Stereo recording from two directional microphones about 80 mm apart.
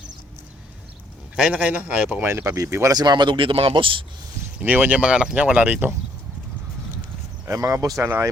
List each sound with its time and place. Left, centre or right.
1.4 s speech: centre
2.3 s speech: right
2.9 s speech: right
4.6 s speech: right
7.4 s speech: right
8.0 s speech: right